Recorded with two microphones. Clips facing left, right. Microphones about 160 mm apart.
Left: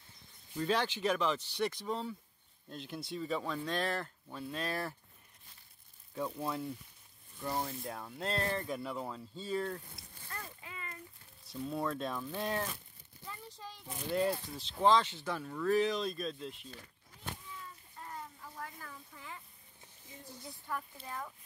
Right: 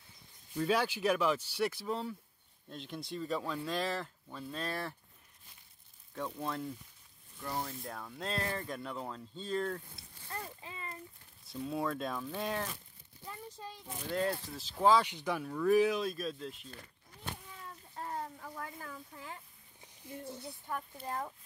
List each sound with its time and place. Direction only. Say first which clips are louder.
0.6 s speech: right 2 dB; 10° right (ahead or behind)
6.1 s speech: left 1 dB; 5° left (ahead or behind)
10.3 s a sound: right 3 dB; 30° right (ahead or behind)
11.4 s speech: right 1 dB; centre (ahead or behind)
14.1 s speech: left 2 dB; 5° left (ahead or behind)
17.6 s a sound: right 6 dB; 65° right (ahead or behind)
20.4 s speech: left 3 dB; 20° right (ahead or behind)
21.0 s speech: right 5 dB; 40° right (ahead or behind)